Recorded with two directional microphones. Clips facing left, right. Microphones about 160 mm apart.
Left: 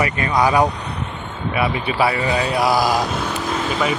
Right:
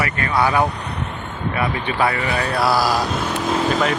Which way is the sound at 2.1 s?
20° left (ahead or behind).